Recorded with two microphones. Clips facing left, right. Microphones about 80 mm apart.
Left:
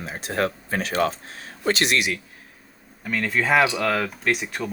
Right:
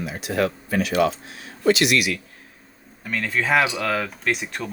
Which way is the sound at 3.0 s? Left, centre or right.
Centre.